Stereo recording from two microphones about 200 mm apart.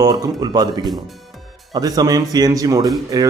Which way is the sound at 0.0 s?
20° right (ahead or behind).